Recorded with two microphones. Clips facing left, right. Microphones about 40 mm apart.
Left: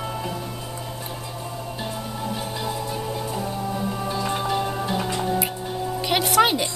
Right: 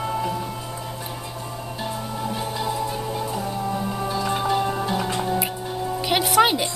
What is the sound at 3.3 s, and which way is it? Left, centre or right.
Music, centre.